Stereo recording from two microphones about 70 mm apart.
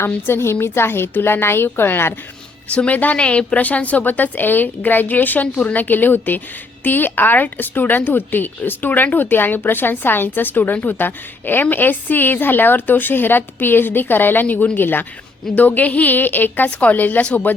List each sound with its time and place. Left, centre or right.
0.3 s a woman's voice: left
2.7 s speech: left